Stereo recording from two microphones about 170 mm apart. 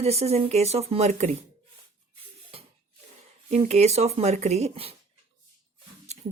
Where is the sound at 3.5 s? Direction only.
40° right (ahead or behind).